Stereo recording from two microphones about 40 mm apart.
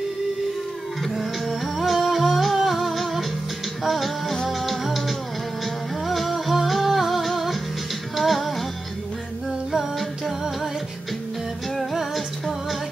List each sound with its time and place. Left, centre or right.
1.0 s music: centre
9.7 s music: centre
11.9 s music: centre